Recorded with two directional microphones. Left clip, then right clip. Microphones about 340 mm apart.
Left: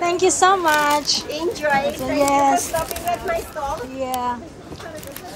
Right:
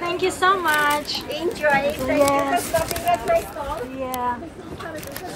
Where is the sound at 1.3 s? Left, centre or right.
Left.